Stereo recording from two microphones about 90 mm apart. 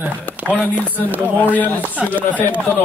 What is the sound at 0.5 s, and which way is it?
Speech, 15° left (ahead or behind).